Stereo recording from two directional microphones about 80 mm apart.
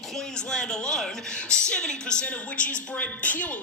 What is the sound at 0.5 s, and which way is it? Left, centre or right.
A woman's voice, centre.